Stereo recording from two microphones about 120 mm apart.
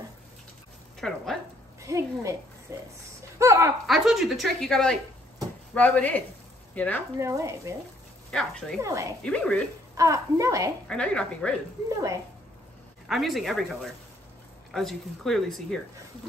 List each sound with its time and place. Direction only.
1.0 s a sound: 5° left (ahead or behind)
1.8 s a woman's voice: 25° right (ahead or behind)
3.8 s a woman's voice: centre (ahead or behind)
7.2 s a woman's voice: 25° right (ahead or behind)
8.3 s speech: 5° left (ahead or behind)
8.8 s a woman's voice: 25° right (ahead or behind)
9.2 s a woman's voice: 10° left (ahead or behind)
9.9 s a woman's voice: 25° right (ahead or behind)
10.9 s a woman's voice: 10° left (ahead or behind)
13.1 s speech: centre (ahead or behind)
14.7 s speech: centre (ahead or behind)